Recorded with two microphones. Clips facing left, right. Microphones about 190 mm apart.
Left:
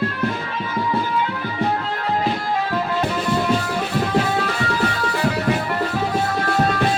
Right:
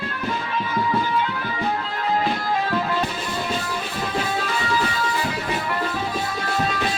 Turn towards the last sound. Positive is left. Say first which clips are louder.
# left 5 dB
turn(degrees=50)  # may be behind; listen again after turning